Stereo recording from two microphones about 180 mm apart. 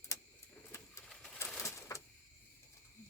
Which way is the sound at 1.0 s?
5° left (ahead or behind).